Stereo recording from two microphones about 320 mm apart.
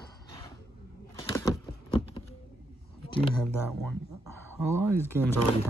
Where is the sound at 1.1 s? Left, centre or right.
Centre.